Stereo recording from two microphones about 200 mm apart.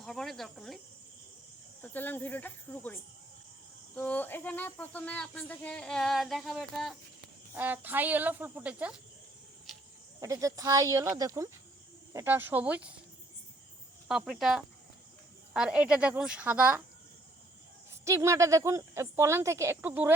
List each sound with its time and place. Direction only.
0.0 s speech: centre (ahead or behind)
1.8 s cricket: 10° left (ahead or behind)
7.5 s speech: 10° right (ahead or behind)
9.7 s cricket: centre (ahead or behind)
10.2 s speech: 15° right (ahead or behind)
14.1 s speech: centre (ahead or behind)
18.0 s speech: 15° right (ahead or behind)